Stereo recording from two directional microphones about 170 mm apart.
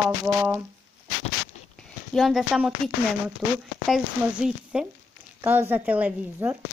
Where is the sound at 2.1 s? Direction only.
Centre (ahead or behind).